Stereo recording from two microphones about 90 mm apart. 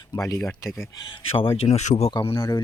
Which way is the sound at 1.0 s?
75° left (ahead or behind).